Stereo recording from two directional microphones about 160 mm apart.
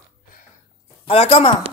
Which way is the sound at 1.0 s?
40° left (ahead or behind).